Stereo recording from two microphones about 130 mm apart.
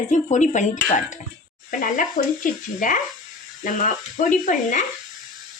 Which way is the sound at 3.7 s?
75° left (ahead or behind).